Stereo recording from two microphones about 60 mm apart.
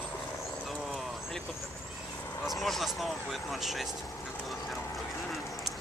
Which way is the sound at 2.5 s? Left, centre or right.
Centre.